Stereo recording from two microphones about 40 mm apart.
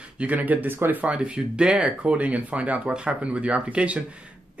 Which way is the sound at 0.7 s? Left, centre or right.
Right.